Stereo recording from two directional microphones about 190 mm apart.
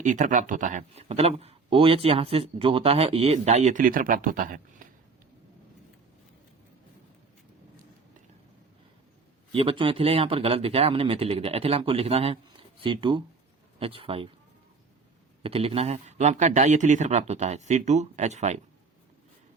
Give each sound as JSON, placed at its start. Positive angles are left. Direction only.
{"t": 0.0, "sound": "a man's voice", "side_deg": -40}
{"t": 9.5, "sound": "speech", "side_deg": -30}
{"t": 15.4, "sound": "a man's voice", "side_deg": -30}